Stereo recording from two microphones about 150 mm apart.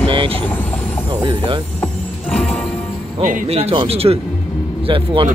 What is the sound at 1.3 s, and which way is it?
Speech, 30° right (ahead or behind).